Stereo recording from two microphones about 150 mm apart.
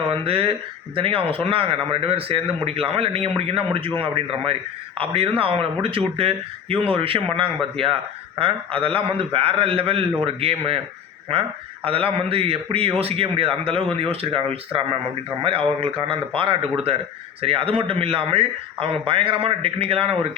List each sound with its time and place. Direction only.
0.1 s a man's voice: 40° right (ahead or behind)